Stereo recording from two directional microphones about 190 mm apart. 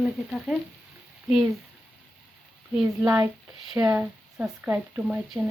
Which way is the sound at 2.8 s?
5° right (ahead or behind).